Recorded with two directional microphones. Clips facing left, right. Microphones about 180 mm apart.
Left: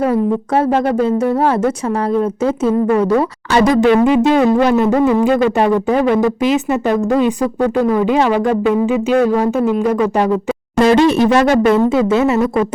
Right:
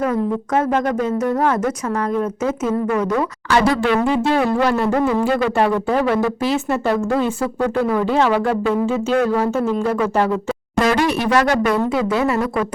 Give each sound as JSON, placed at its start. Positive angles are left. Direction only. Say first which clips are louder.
{"t": 0.0, "sound": "speech", "louder": "left 5 dB", "side_deg": 30}
{"t": 3.5, "sound": "speech", "louder": "left 5 dB", "side_deg": 20}
{"t": 10.8, "sound": "speech", "louder": "left 7 dB", "side_deg": 25}